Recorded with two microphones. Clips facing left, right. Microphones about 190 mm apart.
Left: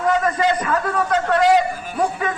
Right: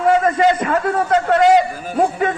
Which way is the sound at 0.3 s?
25° right (ahead or behind).